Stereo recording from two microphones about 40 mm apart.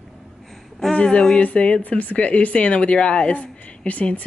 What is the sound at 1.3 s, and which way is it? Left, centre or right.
Speech, left.